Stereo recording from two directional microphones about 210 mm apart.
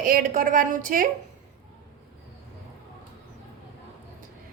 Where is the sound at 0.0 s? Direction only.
40° right (ahead or behind).